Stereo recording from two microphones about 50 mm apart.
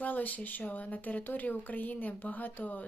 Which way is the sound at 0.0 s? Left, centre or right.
Left.